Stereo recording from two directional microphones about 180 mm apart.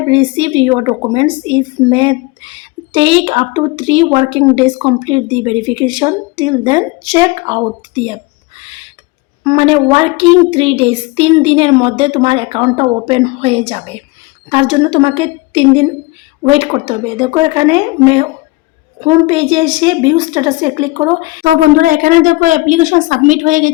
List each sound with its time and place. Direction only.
0.1 s a woman's voice: 30° right (ahead or behind)
21.8 s a woman's voice: 50° right (ahead or behind)